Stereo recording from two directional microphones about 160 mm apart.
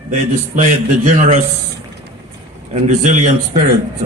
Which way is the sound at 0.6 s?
50° right (ahead or behind).